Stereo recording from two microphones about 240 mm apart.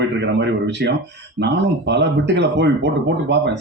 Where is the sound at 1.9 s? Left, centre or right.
Right.